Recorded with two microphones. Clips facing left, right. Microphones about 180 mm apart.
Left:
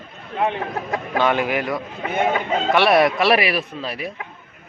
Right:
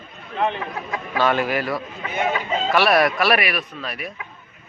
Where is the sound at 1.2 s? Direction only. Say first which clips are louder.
Even; 15° left (ahead or behind).